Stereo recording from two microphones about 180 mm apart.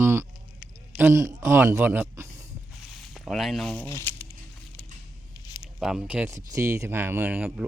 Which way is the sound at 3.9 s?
15° left (ahead or behind).